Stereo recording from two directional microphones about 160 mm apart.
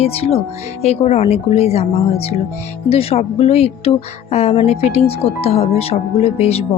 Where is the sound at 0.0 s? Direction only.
40° left (ahead or behind).